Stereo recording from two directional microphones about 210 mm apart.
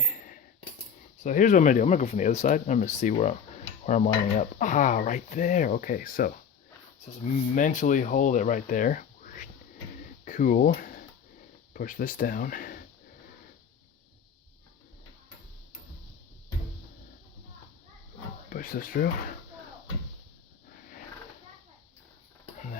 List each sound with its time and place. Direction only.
0.0 s coin: 40° left (ahead or behind)
1.2 s speech: 35° left (ahead or behind)
18.5 s speech: 40° left (ahead or behind)